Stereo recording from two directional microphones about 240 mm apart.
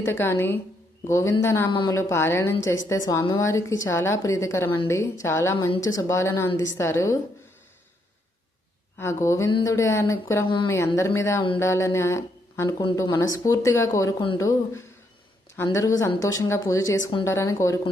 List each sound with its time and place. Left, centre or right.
0.0 s speech: centre
9.0 s speech: centre
17.2 s speech: centre